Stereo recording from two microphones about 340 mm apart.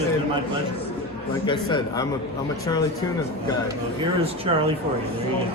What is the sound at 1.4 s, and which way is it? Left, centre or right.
Speech, centre.